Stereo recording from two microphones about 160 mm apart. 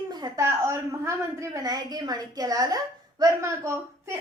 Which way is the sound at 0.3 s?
15° right (ahead or behind).